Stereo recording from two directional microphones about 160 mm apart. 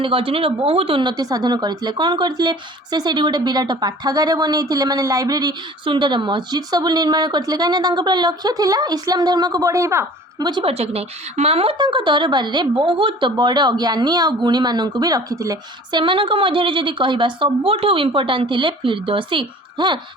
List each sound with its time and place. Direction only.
0.0 s speech: 35° right (ahead or behind); by 10.5 s 20° right (ahead or behind)
10.5 s a woman's voice: 35° right (ahead or behind)